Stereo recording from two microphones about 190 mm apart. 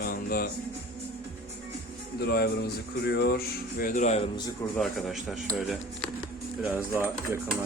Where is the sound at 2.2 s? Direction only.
60° left (ahead or behind); by 4.3 s 35° left (ahead or behind).